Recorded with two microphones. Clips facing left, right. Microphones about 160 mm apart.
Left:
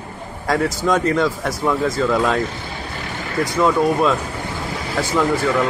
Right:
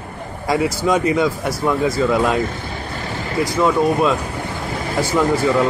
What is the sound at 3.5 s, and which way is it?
Speech, 5° right (ahead or behind).